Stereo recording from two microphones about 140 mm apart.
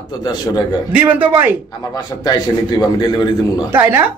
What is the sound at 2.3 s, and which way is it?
A man's voice, 30° left (ahead or behind).